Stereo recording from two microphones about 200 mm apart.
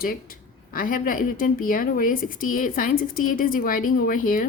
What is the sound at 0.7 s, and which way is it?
A woman's voice, 45° left (ahead or behind).